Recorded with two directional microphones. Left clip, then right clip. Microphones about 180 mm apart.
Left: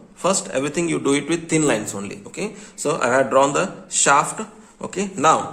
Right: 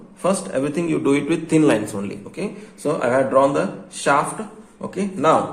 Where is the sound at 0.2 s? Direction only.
30° left (ahead or behind).